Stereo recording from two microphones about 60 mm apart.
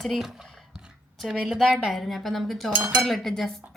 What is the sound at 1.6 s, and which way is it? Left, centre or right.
Cutlery, centre.